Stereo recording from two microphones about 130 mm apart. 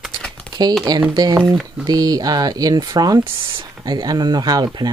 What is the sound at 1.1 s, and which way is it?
Speech, 30° right (ahead or behind).